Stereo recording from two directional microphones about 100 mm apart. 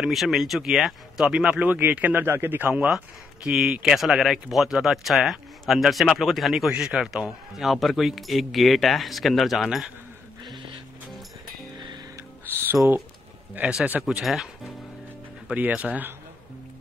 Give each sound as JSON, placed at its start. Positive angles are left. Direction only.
{"t": 0.0, "sound": "speech", "side_deg": 0}
{"t": 13.6, "sound": "speech", "side_deg": -10}